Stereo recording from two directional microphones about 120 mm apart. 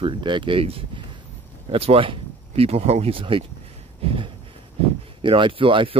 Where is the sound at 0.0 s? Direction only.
40° right (ahead or behind).